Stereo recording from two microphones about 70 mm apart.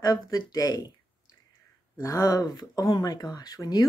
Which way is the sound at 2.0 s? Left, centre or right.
Left.